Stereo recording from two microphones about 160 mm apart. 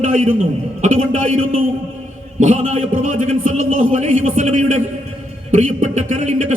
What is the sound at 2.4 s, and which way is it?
A man's voice, 40° right (ahead or behind).